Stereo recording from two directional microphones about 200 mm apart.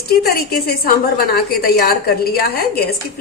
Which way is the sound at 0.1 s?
50° left (ahead or behind).